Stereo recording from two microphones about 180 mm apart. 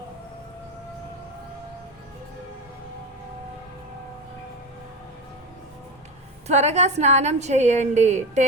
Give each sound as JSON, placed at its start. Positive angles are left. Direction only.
{"t": 6.5, "sound": "a woman's voice", "side_deg": -40}